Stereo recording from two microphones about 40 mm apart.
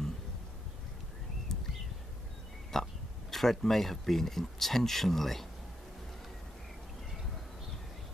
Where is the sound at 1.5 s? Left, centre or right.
Centre.